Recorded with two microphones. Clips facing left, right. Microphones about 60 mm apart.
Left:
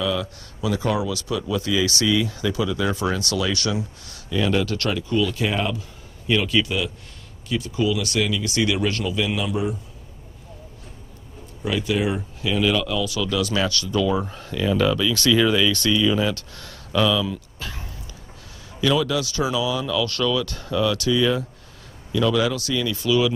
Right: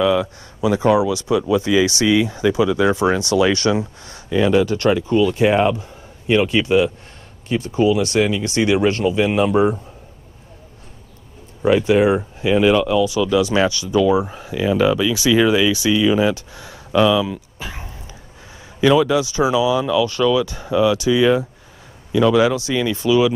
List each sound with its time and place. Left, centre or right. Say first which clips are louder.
0.0 s speech: right 8 dB; right
11.6 s speech: right 9 dB; right